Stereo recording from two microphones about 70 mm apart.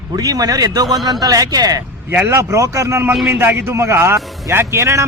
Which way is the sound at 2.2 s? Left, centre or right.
Right.